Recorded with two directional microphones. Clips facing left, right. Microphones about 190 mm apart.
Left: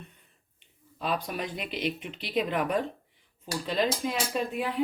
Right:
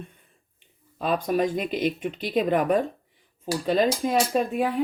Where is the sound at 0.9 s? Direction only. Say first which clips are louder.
Right 8 dB; 50° right (ahead or behind).